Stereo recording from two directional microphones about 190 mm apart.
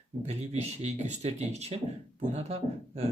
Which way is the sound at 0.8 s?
35° right (ahead or behind).